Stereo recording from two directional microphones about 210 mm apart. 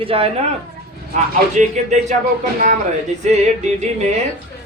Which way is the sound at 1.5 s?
35° right (ahead or behind).